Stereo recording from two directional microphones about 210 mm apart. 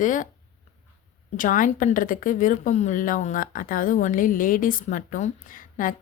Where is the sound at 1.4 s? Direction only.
40° left (ahead or behind).